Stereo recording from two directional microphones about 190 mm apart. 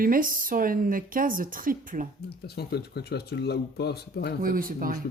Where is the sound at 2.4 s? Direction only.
60° left (ahead or behind).